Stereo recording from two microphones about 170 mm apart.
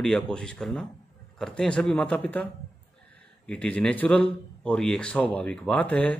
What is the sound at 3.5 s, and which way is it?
Speech, 5° left (ahead or behind).